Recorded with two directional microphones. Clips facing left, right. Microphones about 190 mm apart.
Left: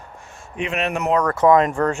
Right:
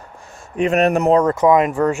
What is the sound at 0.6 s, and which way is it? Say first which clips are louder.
Speech: right 8 dB; 40° right (ahead or behind).